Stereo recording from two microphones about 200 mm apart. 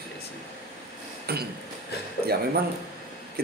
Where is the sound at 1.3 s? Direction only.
50° right (ahead or behind).